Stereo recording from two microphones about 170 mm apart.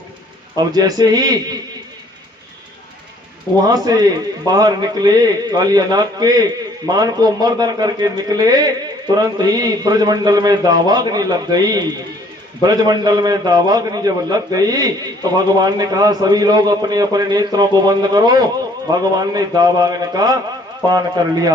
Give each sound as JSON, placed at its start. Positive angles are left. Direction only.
{"t": 0.5, "sound": "a man's voice", "side_deg": -25}
{"t": 3.7, "sound": "a man's voice", "side_deg": -25}